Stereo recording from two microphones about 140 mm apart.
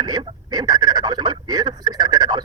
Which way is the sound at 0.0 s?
30° right (ahead or behind).